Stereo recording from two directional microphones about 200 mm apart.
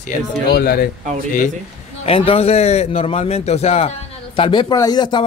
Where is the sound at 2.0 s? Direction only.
30° left (ahead or behind).